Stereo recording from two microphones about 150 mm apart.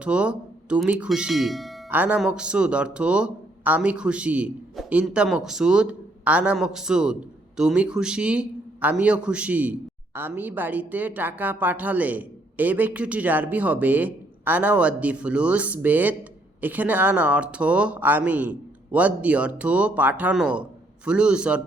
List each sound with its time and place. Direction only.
0.0 s speech: 10° right (ahead or behind)
1.9 s speech: 10° right (ahead or behind)